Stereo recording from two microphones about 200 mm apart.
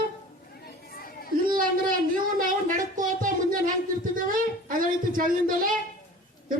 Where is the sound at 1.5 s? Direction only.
45° right (ahead or behind).